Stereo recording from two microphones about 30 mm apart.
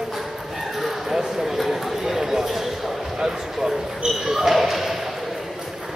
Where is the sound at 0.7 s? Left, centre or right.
Centre.